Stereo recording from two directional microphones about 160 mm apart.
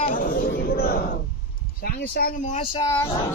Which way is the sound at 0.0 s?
60° left (ahead or behind).